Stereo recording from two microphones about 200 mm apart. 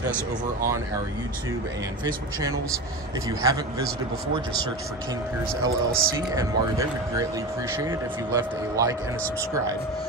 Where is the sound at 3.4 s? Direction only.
15° right (ahead or behind).